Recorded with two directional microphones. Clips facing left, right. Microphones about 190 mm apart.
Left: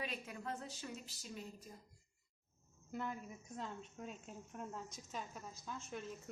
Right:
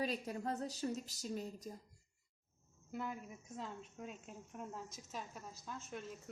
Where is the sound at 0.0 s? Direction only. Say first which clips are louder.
Right 6 dB; 35° right (ahead or behind).